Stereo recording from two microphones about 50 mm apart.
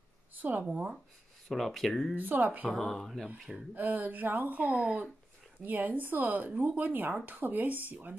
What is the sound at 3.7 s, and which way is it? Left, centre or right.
Speech, right.